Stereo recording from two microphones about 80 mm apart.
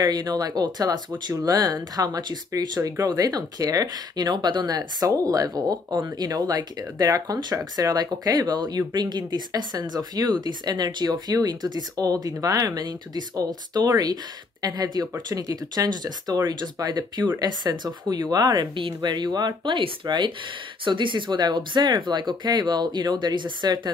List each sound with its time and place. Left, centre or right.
0.0 s speech: right
1.3 s speech: right
20.8 s speech: right